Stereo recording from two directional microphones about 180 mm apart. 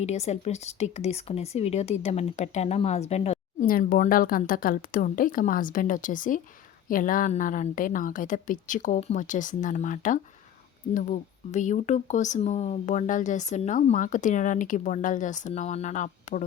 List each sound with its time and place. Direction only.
0.0 s speech: 40° left (ahead or behind)
3.7 s speech: 50° left (ahead or behind)